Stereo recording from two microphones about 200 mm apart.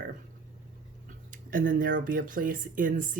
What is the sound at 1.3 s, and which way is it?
Speech, 45° right (ahead or behind).